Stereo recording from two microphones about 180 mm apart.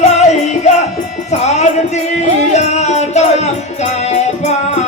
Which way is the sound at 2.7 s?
40° left (ahead or behind).